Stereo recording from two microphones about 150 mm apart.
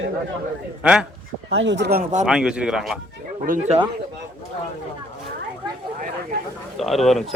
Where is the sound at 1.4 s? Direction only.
90° right.